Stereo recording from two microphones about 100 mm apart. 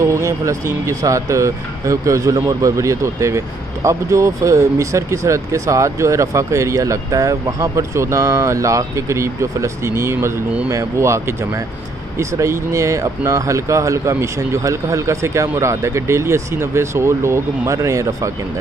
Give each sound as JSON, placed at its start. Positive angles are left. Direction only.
{"t": 0.0, "sound": "speech", "side_deg": -30}